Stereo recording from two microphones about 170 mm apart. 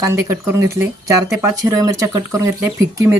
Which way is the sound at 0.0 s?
15° right (ahead or behind).